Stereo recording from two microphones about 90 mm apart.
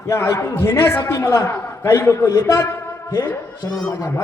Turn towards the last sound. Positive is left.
turn(degrees=35)  # may be behind; listen again after turning